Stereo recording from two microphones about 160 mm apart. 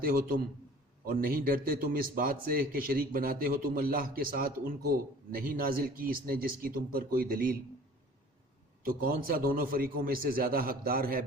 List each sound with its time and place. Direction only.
0.0 s a man's voice: 65° right (ahead or behind)
8.8 s a man's voice: 65° right (ahead or behind)